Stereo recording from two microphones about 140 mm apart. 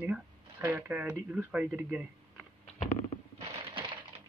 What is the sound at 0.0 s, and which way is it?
Speech, 15° right (ahead or behind).